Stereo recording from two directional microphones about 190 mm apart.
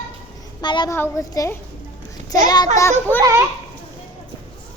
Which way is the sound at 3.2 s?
15° right (ahead or behind).